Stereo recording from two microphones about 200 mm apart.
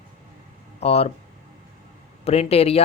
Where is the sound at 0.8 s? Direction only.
30° left (ahead or behind).